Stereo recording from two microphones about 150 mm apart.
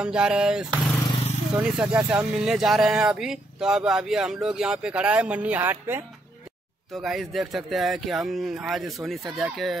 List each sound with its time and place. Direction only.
0.0 s speech: 5° right (ahead or behind)
6.9 s speech: centre (ahead or behind)